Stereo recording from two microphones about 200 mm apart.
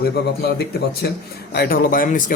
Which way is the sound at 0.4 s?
55° left (ahead or behind).